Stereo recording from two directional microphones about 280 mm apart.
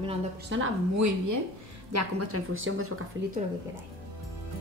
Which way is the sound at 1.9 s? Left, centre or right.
Right.